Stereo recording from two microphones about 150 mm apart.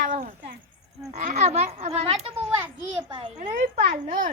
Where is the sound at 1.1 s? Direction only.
50° right (ahead or behind).